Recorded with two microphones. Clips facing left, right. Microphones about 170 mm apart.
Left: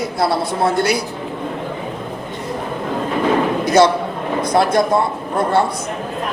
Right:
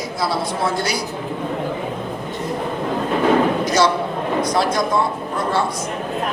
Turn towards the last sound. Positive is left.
turn(degrees=55)  # may be behind; listen again after turning